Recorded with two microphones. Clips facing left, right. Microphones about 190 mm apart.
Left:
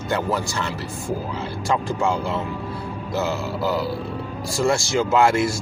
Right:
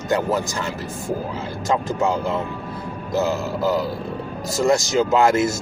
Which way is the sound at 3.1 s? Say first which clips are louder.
Right 3 dB; 40° right (ahead or behind).